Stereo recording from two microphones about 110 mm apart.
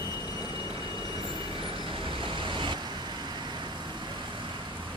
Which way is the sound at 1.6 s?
50° right (ahead or behind).